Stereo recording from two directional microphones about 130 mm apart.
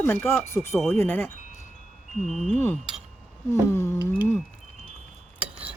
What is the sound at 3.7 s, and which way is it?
Speech, 20° left (ahead or behind).